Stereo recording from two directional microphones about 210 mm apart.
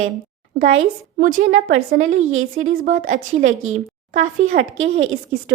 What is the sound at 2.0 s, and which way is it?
Speech, 75° right (ahead or behind).